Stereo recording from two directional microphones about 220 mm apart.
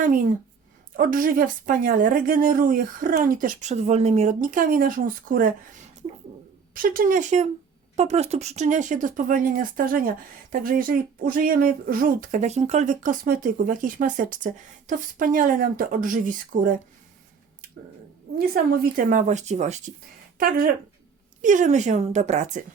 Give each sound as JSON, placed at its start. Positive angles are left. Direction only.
{"t": 0.9, "sound": "speech", "side_deg": -40}
{"t": 6.7, "sound": "speech", "side_deg": -40}
{"t": 18.3, "sound": "speech", "side_deg": -40}
{"t": 21.4, "sound": "speech", "side_deg": -35}